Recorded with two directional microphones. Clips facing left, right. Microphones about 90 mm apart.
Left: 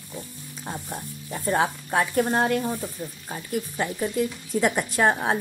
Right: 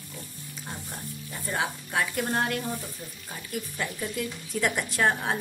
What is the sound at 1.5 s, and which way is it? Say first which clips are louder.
A woman's voice: left 6 dB; 40° left (ahead or behind).